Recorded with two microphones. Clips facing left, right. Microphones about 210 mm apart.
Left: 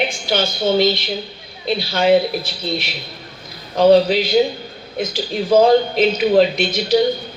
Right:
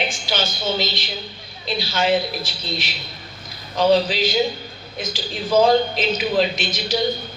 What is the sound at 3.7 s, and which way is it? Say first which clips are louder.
A man's voice: left 5 dB; 55° left (ahead or behind).